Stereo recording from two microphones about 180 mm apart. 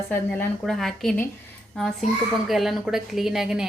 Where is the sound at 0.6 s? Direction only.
Centre (ahead or behind).